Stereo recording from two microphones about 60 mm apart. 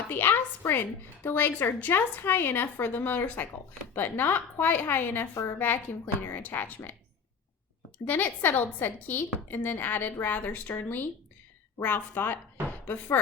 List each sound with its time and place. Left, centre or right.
0.1 s a woman's voice: left
5.3 s a woman's voice: left
5.5 s a woman's voice: left
7.9 s a woman's voice: left